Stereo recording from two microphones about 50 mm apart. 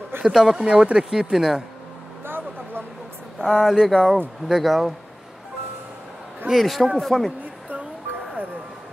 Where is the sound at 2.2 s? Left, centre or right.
Right.